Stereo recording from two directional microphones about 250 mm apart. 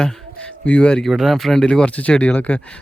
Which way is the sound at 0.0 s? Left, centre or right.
Centre.